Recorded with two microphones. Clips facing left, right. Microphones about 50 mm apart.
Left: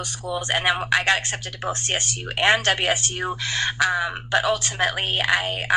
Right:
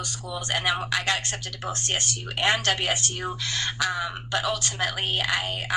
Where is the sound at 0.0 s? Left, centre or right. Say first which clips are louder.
Left 5 dB; left.